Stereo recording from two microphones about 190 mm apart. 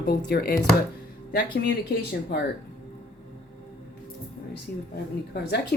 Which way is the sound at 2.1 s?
60° left (ahead or behind).